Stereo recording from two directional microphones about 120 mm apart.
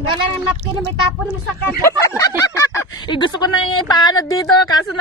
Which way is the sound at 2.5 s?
20° left (ahead or behind).